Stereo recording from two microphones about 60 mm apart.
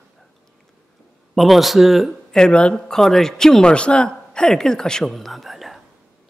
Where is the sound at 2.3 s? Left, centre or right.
Centre.